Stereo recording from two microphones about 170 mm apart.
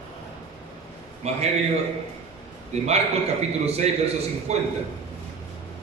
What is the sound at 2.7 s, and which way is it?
A man's voice, 40° right (ahead or behind).